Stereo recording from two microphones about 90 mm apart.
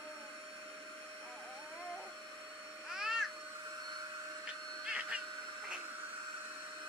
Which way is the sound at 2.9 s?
5° right (ahead or behind).